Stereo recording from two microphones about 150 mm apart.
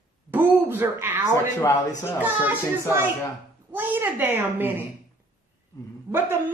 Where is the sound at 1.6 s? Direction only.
20° left (ahead or behind).